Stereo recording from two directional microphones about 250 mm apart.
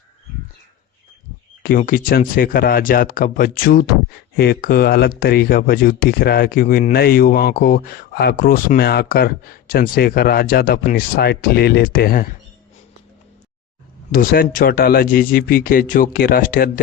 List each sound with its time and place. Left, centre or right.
1.6 s speech: left
14.1 s speech: left